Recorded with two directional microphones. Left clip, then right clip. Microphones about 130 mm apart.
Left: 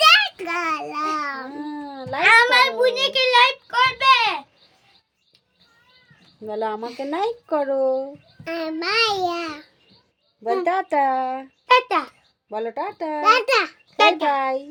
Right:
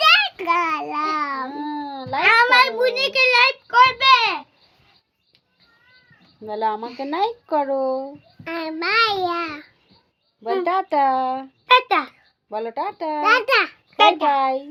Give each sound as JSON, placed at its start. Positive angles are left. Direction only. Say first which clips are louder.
{"t": 0.0, "sound": "a sound", "louder": "left 1 dB", "side_deg": 30}
{"t": 0.3, "sound": "babbling", "louder": "right 4 dB", "side_deg": 15}
{"t": 1.5, "sound": "cat", "louder": "right 4 dB", "side_deg": 50}
{"t": 2.2, "sound": "a sound", "louder": "even", "side_deg": 20}
{"t": 6.4, "sound": "speech", "louder": "right 3 dB", "side_deg": 35}
{"t": 6.8, "sound": "a child's voice", "louder": "even", "side_deg": 25}
{"t": 7.1, "sound": "speech", "louder": "right 2 dB", "side_deg": 40}
{"t": 8.4, "sound": "a child's voice", "louder": "right 1 dB", "side_deg": 20}
{"t": 10.6, "sound": "speech", "louder": "right 2 dB", "side_deg": 35}
{"t": 11.6, "sound": "a sound", "louder": "right 1 dB", "side_deg": 10}
{"t": 12.5, "sound": "speech", "louder": "right 1 dB", "side_deg": 30}
{"t": 13.2, "sound": "a child's voice", "louder": "even", "side_deg": 10}
{"t": 14.3, "sound": "speech", "louder": "right 3 dB", "side_deg": 35}